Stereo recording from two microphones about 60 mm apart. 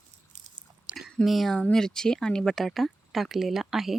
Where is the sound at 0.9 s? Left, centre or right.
Centre.